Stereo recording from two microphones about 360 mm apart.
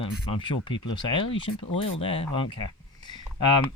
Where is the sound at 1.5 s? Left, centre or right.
Left.